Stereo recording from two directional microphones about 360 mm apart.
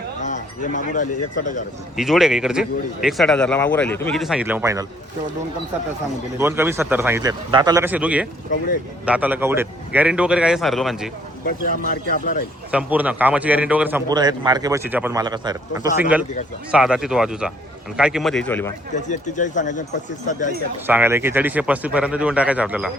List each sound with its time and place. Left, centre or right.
0.2 s speech: centre
2.0 s a man's voice: centre
6.4 s a man's voice: centre
11.9 s speech: left
12.7 s a man's voice: centre
18.9 s speech: centre
20.8 s a man's voice: centre